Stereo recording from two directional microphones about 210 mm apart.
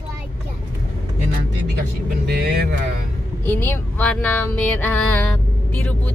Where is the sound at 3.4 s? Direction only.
10° left (ahead or behind).